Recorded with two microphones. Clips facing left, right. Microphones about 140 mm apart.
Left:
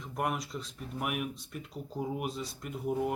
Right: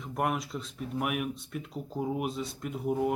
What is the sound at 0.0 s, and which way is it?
Speech, centre (ahead or behind).